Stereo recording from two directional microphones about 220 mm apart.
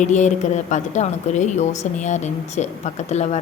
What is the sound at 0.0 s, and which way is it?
A woman's voice, 35° left (ahead or behind).